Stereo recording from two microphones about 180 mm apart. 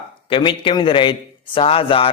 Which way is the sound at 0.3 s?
30° left (ahead or behind).